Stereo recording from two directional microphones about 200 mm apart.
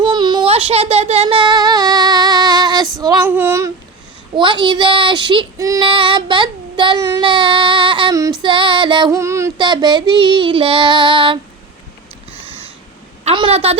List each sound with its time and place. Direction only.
0.0 s child singing: 20° right (ahead or behind)
3.0 s female singing: 15° right (ahead or behind)
4.4 s child singing: 25° right (ahead or behind)
13.2 s a woman's voice: 25° right (ahead or behind)